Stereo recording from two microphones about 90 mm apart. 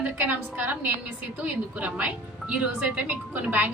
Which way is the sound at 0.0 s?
20° right (ahead or behind).